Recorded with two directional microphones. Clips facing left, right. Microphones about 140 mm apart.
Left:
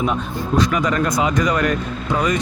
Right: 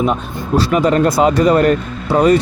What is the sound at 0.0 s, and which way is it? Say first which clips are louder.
Speech: right 4 dB; 30° right (ahead or behind).